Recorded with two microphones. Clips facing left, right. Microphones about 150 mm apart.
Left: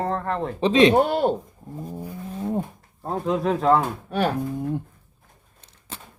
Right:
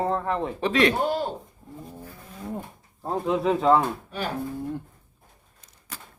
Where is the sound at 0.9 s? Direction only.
60° left (ahead or behind).